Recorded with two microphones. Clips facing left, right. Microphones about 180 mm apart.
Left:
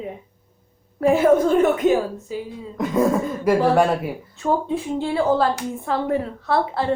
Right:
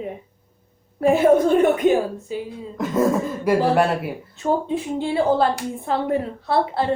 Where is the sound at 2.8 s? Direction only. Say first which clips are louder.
Even; centre (ahead or behind).